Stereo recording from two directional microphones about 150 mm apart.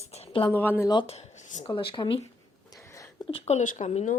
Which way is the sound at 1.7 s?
35° left (ahead or behind).